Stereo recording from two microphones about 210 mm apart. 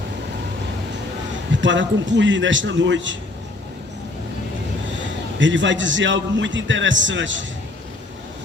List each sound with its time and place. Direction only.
1.6 s a man's voice: 60° right (ahead or behind)
5.4 s a man's voice: 60° right (ahead or behind)